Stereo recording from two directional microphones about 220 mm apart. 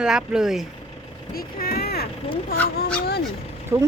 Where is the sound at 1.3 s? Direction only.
45° left (ahead or behind).